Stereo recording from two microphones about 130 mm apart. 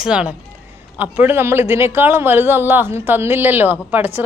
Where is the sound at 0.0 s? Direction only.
5° right (ahead or behind).